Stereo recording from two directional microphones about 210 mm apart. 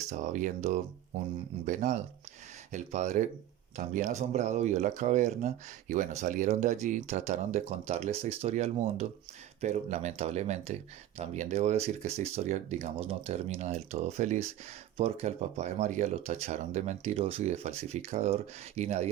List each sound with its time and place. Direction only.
0.1 s speech: 35° right (ahead or behind)